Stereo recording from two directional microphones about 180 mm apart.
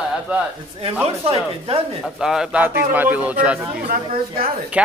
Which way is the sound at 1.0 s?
30° right (ahead or behind).